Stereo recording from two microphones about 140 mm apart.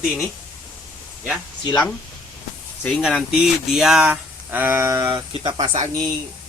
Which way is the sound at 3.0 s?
Centre (ahead or behind).